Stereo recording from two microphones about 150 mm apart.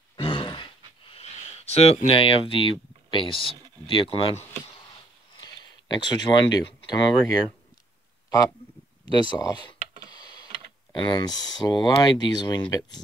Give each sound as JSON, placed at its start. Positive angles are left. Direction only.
{"t": 0.1, "sound": "sigh", "side_deg": 35}
{"t": 2.0, "sound": "speech", "side_deg": 40}
{"t": 5.4, "sound": "a sound", "side_deg": 30}
{"t": 9.0, "sound": "speech", "side_deg": 30}